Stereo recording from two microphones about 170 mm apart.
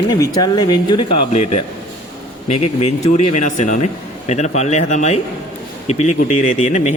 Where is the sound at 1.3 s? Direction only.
40° left (ahead or behind).